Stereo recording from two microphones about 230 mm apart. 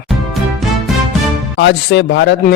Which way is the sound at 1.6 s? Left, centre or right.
Left.